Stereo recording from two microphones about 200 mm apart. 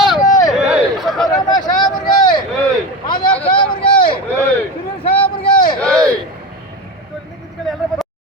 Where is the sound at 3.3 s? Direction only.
25° left (ahead or behind).